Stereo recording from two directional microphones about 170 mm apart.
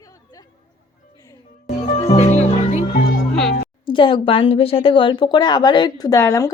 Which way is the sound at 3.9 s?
30° left (ahead or behind).